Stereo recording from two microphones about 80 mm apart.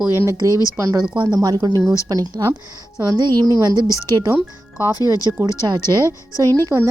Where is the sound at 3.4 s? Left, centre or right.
Right.